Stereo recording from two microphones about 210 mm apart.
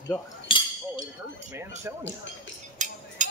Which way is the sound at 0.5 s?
25° left (ahead or behind).